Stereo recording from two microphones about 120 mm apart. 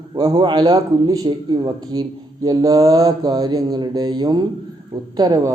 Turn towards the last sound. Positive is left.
turn(degrees=-30)  # may be behind; listen again after turning